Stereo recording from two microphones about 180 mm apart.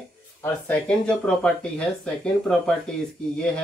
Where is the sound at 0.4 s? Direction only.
5° left (ahead or behind).